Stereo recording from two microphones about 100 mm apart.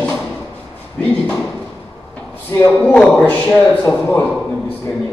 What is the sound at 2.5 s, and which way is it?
Speech, 25° left (ahead or behind).